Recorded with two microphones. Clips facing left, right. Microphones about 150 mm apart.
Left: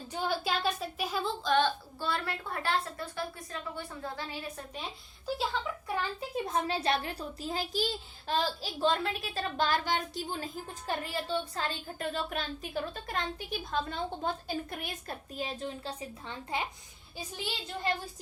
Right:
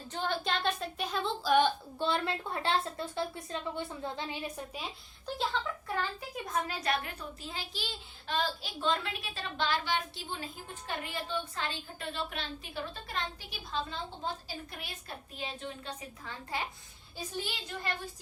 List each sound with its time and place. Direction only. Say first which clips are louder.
0.1 s a woman's voice: left 1 dB; 10° left (ahead or behind)
1.5 s a woman's voice: right 2 dB; 15° right (ahead or behind)
5.5 s speech: even; 5° left (ahead or behind)
5.9 s a woman's voice: left 3 dB; 25° left (ahead or behind)